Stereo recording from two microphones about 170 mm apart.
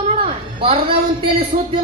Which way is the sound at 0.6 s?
30° right (ahead or behind).